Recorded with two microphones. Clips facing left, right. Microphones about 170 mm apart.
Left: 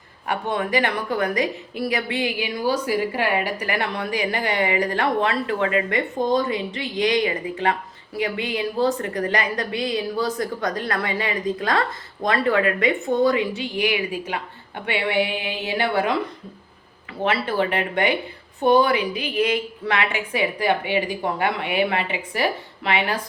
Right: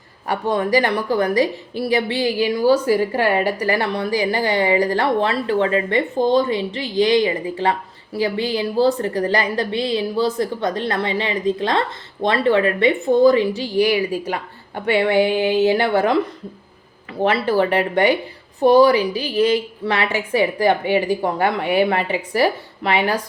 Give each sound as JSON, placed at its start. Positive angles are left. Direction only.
{"t": 0.3, "sound": "a woman's voice", "side_deg": -35}
{"t": 17.2, "sound": "a woman's voice", "side_deg": -40}